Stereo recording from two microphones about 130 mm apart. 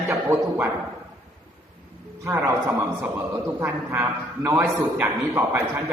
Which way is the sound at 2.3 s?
10° right (ahead or behind).